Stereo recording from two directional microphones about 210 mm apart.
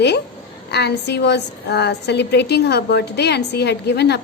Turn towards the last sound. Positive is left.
turn(degrees=55)  # may be behind; listen again after turning